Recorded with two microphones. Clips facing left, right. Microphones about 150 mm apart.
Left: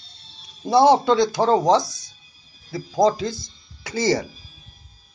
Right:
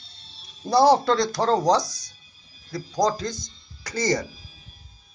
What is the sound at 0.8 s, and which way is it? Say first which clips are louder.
Speech: left 3 dB; centre (ahead or behind).